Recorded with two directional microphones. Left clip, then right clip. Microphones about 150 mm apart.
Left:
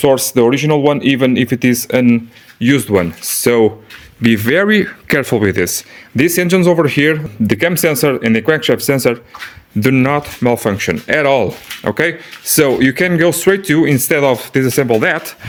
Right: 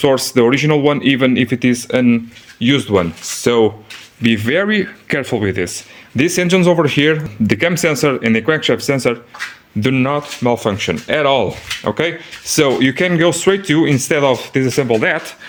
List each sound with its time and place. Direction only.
0.0 s speech: 20° left (ahead or behind); by 5.7 s 40° left (ahead or behind)
6.1 s speech: 25° left (ahead or behind)
9.8 s speech: 40° left (ahead or behind)